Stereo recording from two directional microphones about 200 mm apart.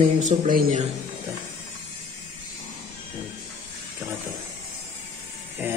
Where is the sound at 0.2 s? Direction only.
40° right (ahead or behind).